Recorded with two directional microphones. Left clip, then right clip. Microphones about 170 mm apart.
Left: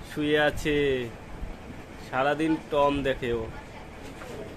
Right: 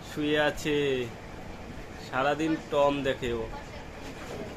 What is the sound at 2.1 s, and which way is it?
Speech, 35° left (ahead or behind).